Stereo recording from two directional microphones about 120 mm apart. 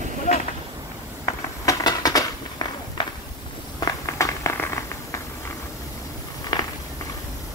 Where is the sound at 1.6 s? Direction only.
30° left (ahead or behind).